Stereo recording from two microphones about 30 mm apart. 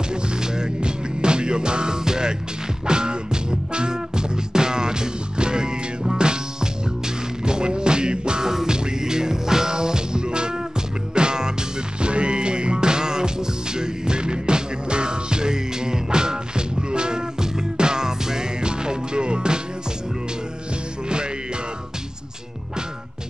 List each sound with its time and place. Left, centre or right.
0.1 s music: right